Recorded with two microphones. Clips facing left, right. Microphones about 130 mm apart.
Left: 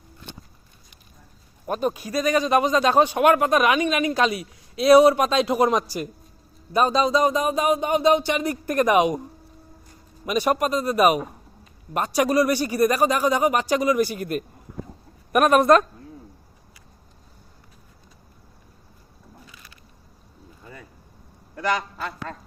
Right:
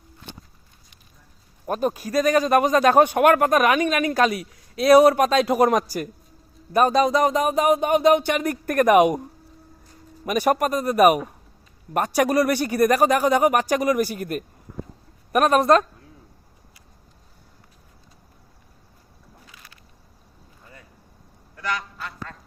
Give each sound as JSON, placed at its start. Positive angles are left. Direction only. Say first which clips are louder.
{"t": 1.7, "sound": "speech", "louder": "right 2 dB", "side_deg": -45}
{"t": 10.2, "sound": "a man's voice", "louder": "right 1 dB", "side_deg": -45}